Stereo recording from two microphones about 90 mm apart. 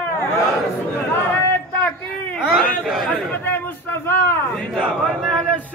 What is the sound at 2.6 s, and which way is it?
Chatter, 15° left (ahead or behind).